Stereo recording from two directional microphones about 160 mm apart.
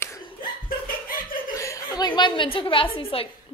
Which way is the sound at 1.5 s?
20° left (ahead or behind).